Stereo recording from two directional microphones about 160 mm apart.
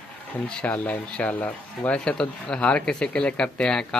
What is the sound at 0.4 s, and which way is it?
Speech, 5° left (ahead or behind).